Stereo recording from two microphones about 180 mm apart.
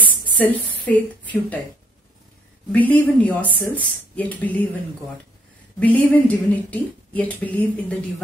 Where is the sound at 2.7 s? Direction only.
10° left (ahead or behind).